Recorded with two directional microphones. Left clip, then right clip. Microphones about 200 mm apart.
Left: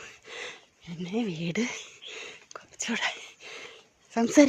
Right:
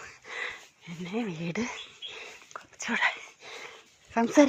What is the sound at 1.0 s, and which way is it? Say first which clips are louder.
Rodents: left 2 dB; 20° left (ahead or behind).